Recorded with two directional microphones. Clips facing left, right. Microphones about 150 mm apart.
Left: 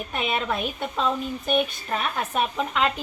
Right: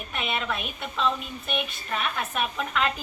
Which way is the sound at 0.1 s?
40° left (ahead or behind).